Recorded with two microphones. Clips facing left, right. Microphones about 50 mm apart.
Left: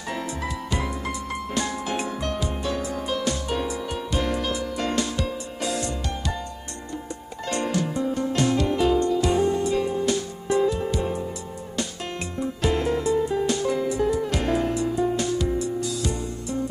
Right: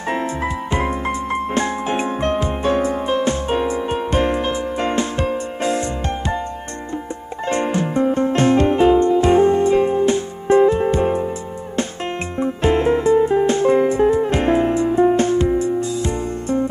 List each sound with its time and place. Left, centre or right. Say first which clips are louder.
0.1 s music: right 8 dB; right
7.4 s music: right 6 dB; right
12.4 s music: right 7 dB; right